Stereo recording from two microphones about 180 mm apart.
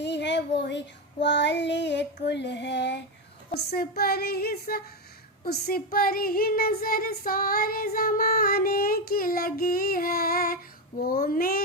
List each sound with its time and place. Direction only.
0.0 s a sound: 75° left (ahead or behind)
0.6 s child singing: 75° left (ahead or behind)
3.5 s child singing: 60° left (ahead or behind)